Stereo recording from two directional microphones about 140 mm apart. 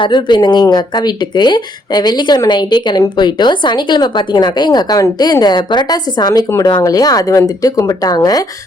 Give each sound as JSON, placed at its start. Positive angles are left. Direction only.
{"t": 0.0, "sound": "speech", "side_deg": 35}